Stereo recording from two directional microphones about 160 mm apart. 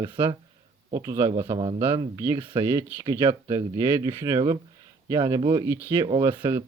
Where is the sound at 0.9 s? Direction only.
20° right (ahead or behind).